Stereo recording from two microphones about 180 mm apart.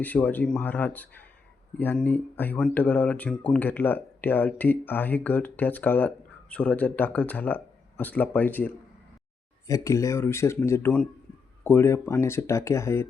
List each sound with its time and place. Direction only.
0.0 s speech: 10° left (ahead or behind)